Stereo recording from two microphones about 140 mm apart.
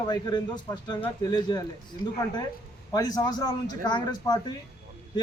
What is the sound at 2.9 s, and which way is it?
A man's voice, 30° left (ahead or behind).